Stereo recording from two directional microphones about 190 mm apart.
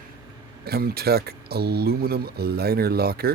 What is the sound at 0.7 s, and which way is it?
Speech, 55° right (ahead or behind).